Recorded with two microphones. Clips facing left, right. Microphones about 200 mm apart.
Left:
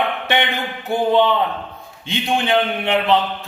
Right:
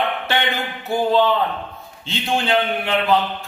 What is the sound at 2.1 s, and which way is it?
A man's voice, 20° left (ahead or behind).